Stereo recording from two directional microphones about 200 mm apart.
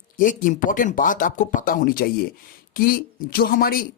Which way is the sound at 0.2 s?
40° left (ahead or behind).